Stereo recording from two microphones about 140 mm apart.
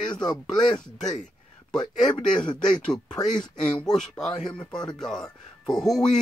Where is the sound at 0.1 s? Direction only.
30° left (ahead or behind).